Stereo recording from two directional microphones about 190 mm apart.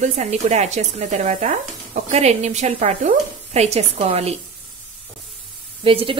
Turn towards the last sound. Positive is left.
turn(degrees=-30)  # may be behind; listen again after turning